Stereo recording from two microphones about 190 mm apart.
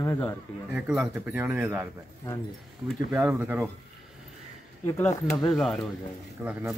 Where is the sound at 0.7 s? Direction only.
5° right (ahead or behind).